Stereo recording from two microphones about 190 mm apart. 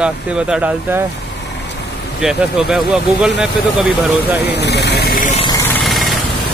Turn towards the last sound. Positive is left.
turn(degrees=0)  # may be behind; listen again after turning